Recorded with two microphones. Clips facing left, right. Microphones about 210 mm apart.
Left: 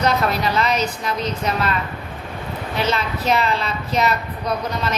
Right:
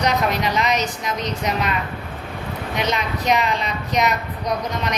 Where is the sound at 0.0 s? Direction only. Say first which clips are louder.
Left 1 dB; 15° right (ahead or behind).